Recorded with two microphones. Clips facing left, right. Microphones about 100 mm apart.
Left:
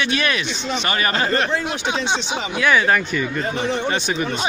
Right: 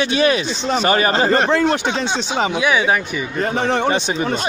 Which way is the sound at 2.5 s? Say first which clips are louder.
Left 2 dB; 15° right (ahead or behind).